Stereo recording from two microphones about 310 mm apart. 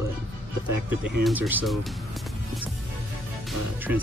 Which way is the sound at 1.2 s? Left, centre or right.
Centre.